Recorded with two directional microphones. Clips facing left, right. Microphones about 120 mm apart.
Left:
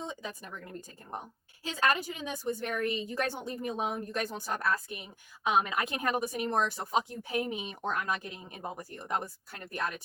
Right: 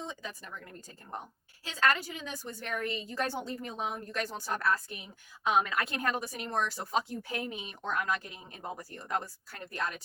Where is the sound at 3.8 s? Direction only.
20° left (ahead or behind).